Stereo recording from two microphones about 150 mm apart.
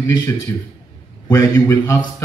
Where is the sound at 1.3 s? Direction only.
20° left (ahead or behind).